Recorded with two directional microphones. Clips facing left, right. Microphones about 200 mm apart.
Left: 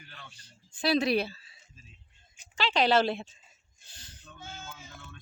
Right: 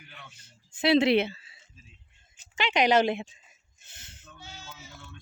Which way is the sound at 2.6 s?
15° right (ahead or behind).